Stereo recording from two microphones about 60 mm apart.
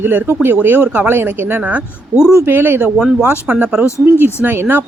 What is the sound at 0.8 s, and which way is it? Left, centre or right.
Speech, right.